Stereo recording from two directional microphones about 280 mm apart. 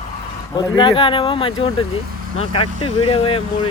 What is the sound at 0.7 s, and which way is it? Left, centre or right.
Speech, centre.